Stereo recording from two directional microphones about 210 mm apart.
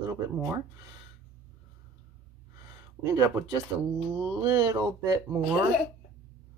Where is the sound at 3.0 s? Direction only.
15° right (ahead or behind).